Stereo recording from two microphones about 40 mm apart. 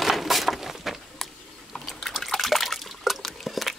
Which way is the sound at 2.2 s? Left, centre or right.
Centre.